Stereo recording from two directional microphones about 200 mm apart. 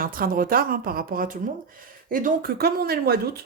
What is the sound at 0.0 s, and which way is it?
Speech, 45° right (ahead or behind).